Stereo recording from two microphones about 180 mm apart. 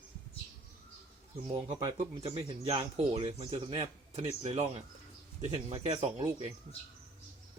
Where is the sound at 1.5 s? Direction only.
25° right (ahead or behind).